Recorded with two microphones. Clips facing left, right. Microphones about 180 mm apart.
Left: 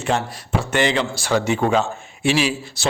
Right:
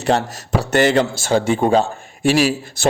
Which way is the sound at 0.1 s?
35° right (ahead or behind).